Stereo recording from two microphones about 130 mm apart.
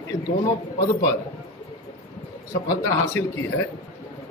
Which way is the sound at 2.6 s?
25° left (ahead or behind).